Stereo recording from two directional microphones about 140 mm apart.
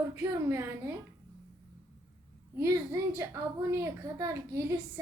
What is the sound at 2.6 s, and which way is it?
A woman's voice, 20° right (ahead or behind).